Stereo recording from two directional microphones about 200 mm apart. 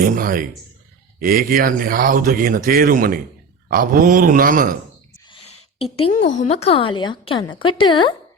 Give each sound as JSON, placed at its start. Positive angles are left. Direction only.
{"t": 0.0, "sound": "speech", "side_deg": -45}
{"t": 5.2, "sound": "a woman's voice", "side_deg": 25}